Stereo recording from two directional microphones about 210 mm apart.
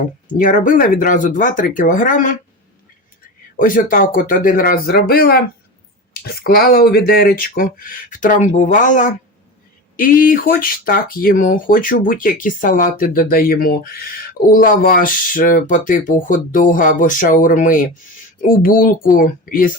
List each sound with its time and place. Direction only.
0.3 s speech: 40° left (ahead or behind)
3.6 s speech: 40° left (ahead or behind)